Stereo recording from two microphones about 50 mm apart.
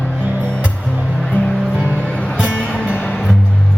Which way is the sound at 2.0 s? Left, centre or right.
Centre.